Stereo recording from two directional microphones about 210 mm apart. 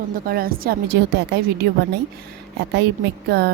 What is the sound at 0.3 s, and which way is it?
Speech, 45° right (ahead or behind).